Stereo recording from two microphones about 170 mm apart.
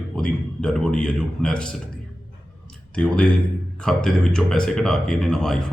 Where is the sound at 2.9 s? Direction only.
5° left (ahead or behind).